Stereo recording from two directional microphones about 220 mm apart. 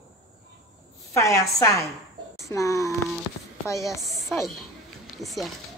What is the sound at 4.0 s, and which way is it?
A woman's voice, centre (ahead or behind).